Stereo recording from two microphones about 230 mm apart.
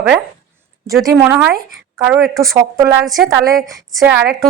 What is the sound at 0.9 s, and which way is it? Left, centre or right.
A woman's voice, centre.